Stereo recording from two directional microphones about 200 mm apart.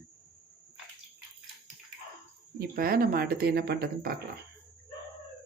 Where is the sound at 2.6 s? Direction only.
45° right (ahead or behind).